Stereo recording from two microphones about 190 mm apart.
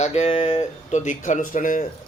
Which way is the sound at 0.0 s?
35° left (ahead or behind).